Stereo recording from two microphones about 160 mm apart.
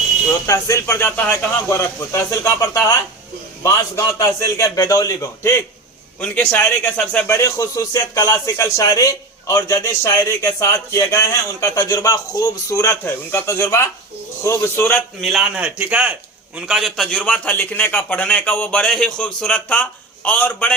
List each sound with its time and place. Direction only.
0.4 s a man's voice: 20° left (ahead or behind)
15.2 s a man's voice: 5° right (ahead or behind)